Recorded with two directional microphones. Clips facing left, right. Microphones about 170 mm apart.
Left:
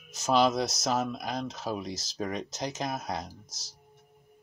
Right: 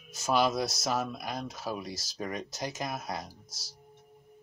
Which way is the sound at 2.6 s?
20° left (ahead or behind).